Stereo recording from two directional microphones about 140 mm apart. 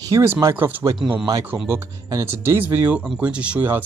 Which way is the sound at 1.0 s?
30° right (ahead or behind).